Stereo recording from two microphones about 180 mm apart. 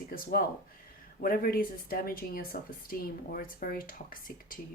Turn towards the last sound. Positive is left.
turn(degrees=50)  # may be behind; listen again after turning